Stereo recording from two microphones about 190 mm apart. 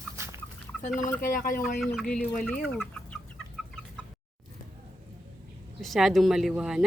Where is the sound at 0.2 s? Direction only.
15° right (ahead or behind).